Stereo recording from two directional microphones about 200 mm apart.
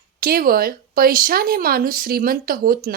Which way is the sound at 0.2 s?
50° right (ahead or behind).